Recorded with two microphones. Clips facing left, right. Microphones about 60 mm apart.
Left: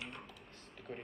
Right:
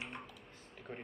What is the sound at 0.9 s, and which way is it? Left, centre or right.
Speech, centre.